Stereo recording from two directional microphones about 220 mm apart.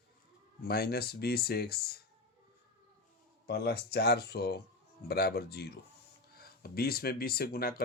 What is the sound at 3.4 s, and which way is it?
Speech, 45° left (ahead or behind).